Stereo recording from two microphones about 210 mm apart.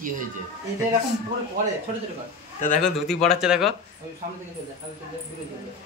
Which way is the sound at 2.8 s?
Centre (ahead or behind).